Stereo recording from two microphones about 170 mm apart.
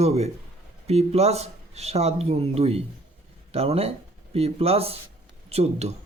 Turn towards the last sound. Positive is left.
turn(degrees=-40)  # may be behind; listen again after turning